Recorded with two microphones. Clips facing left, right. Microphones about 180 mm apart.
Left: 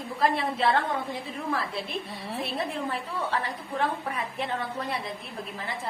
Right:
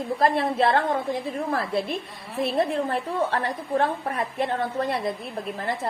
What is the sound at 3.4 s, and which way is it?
A woman's voice, 50° right (ahead or behind).